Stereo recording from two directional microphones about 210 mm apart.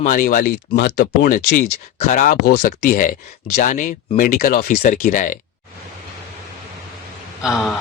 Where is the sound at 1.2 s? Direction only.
40° left (ahead or behind).